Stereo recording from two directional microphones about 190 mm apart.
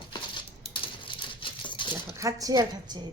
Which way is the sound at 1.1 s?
25° left (ahead or behind).